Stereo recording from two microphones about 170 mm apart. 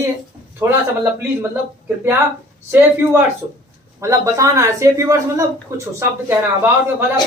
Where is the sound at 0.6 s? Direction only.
15° right (ahead or behind).